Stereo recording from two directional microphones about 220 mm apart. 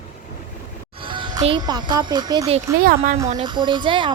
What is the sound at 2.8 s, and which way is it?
Speech, 45° right (ahead or behind).